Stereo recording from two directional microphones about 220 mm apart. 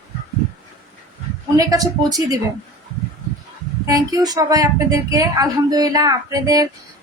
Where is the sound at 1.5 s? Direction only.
15° right (ahead or behind).